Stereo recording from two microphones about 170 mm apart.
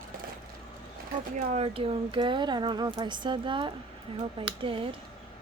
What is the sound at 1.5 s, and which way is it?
Speech, 35° right (ahead or behind).